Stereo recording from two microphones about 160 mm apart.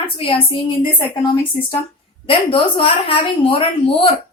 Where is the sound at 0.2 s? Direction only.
35° left (ahead or behind).